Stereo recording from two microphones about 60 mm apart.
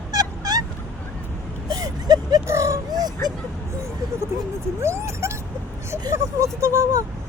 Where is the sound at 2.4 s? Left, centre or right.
Right.